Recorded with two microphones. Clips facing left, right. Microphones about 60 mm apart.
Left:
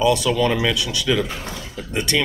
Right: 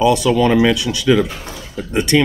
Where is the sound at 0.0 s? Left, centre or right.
Right.